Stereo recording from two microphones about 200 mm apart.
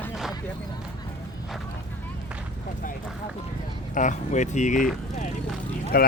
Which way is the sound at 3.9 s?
40° left (ahead or behind).